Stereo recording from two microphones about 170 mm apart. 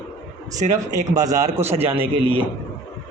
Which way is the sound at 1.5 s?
40° right (ahead or behind).